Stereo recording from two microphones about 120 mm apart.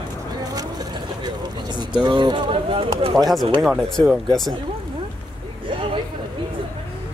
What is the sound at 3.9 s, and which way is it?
Speech, centre (ahead or behind).